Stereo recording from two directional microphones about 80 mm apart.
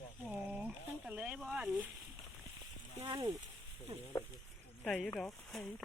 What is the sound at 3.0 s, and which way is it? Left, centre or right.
Speech, right.